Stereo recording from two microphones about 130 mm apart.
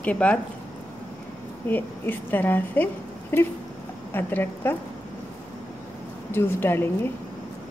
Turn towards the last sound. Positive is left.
turn(degrees=15)  # may be behind; listen again after turning